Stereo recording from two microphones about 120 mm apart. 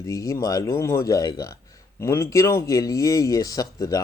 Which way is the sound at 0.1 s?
30° left (ahead or behind).